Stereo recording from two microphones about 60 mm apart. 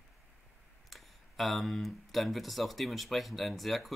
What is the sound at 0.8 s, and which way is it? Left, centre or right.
Speech, centre.